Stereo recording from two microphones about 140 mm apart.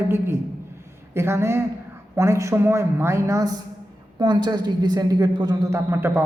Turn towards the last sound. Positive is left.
turn(degrees=-15)  # may be behind; listen again after turning